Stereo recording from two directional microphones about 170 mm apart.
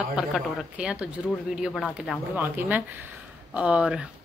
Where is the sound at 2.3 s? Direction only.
10° right (ahead or behind).